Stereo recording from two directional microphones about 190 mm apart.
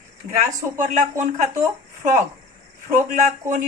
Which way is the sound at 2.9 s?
40° right (ahead or behind).